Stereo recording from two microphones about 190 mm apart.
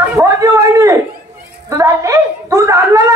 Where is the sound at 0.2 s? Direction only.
15° right (ahead or behind).